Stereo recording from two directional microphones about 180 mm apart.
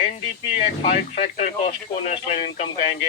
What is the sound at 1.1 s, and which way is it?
Speech, 35° left (ahead or behind).